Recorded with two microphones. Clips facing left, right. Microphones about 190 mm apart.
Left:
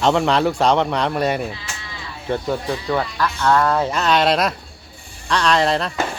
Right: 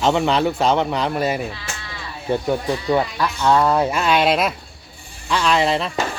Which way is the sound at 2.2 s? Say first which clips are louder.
Right 2 dB; 15° right (ahead or behind).